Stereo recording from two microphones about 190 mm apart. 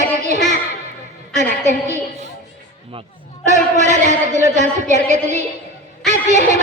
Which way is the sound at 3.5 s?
40° right (ahead or behind).